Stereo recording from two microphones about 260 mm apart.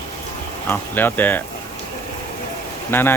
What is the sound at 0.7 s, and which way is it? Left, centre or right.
Speech, centre.